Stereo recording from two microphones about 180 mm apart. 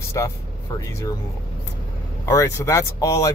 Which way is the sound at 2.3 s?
15° left (ahead or behind).